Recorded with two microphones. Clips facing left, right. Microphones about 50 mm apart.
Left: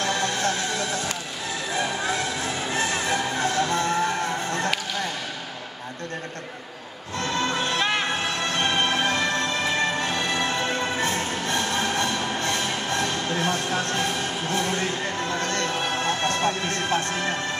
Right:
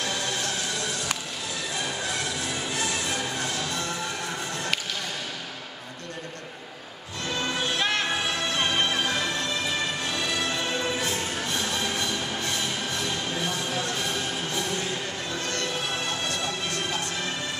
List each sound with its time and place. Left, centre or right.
0.0 s music: left
2.4 s music: left
7.3 s music: left
7.8 s music: centre
8.5 s music: left